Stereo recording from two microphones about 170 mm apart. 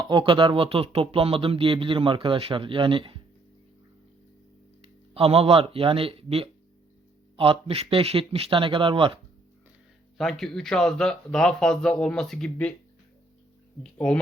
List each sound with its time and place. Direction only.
0.0 s speech: 30° right (ahead or behind)
5.1 s speech: 35° right (ahead or behind)
10.2 s a man's voice: centre (ahead or behind)